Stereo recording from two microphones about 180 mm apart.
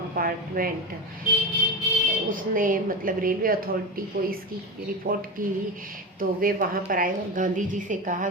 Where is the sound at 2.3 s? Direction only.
50° right (ahead or behind).